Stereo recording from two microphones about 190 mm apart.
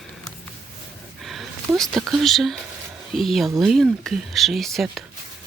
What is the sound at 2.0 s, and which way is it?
Speech, centre (ahead or behind).